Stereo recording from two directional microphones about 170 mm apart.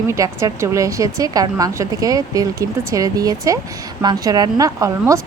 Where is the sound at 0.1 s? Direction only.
20° right (ahead or behind).